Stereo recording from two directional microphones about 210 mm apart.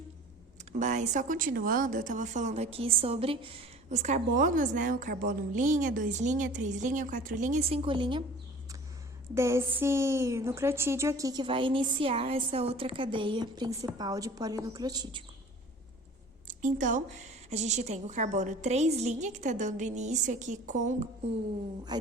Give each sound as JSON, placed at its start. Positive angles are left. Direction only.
{"t": 0.7, "sound": "speech", "side_deg": -35}
{"t": 9.3, "sound": "a woman's voice", "side_deg": -15}
{"t": 16.6, "sound": "a woman's voice", "side_deg": -35}